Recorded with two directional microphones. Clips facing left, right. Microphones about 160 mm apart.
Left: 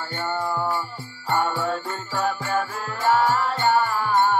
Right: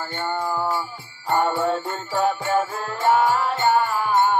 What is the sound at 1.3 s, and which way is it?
Jingle bell, 20° right (ahead or behind).